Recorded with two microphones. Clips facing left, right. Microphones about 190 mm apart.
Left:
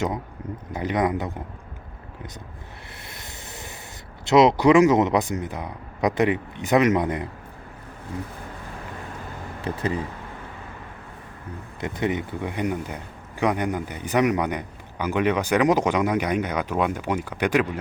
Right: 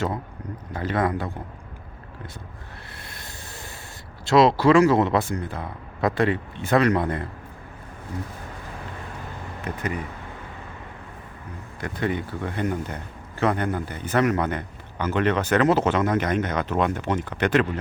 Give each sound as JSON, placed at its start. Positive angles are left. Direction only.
{"t": 0.7, "sound": "a man's voice", "side_deg": 15}
{"t": 3.0, "sound": "a sound", "side_deg": 20}
{"t": 4.3, "sound": "a man's voice", "side_deg": 20}
{"t": 9.6, "sound": "speech", "side_deg": 30}
{"t": 11.8, "sound": "a man's voice", "side_deg": 20}